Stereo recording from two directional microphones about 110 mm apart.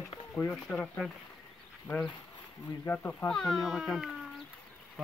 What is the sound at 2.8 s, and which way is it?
Speech, 20° left (ahead or behind).